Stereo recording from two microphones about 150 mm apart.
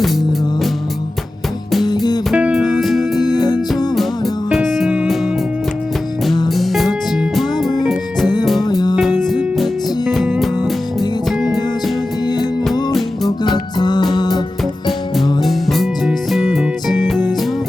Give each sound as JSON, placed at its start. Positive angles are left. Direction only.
{"t": 2.3, "sound": "music", "side_deg": -5}
{"t": 3.2, "sound": "music", "side_deg": 25}
{"t": 4.4, "sound": "music", "side_deg": 0}
{"t": 6.5, "sound": "music", "side_deg": 0}
{"t": 8.6, "sound": "music", "side_deg": 25}
{"t": 9.2, "sound": "music", "side_deg": 0}
{"t": 11.3, "sound": "music", "side_deg": 0}
{"t": 12.2, "sound": "music", "side_deg": 25}
{"t": 12.9, "sound": "music", "side_deg": 0}
{"t": 13.7, "sound": "music", "side_deg": 30}
{"t": 14.8, "sound": "music", "side_deg": 0}